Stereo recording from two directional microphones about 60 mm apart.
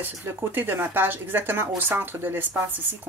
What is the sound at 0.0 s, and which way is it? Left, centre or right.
Speech, right.